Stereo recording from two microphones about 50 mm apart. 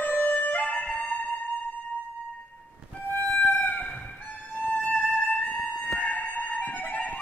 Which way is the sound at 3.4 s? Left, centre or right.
Left.